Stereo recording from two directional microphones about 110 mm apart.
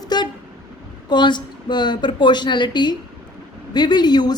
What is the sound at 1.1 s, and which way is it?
A woman's voice, 45° left (ahead or behind).